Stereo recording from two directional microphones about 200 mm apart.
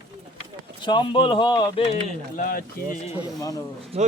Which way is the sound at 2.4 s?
45° left (ahead or behind).